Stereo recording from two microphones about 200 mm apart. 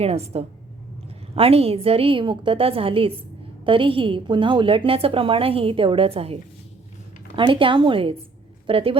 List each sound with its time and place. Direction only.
0.0 s a woman's voice: 30° right (ahead or behind)